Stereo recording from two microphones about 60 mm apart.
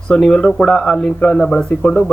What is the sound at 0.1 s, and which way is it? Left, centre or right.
A man's voice, centre.